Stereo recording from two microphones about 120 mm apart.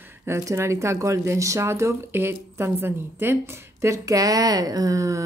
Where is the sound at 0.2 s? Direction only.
20° right (ahead or behind).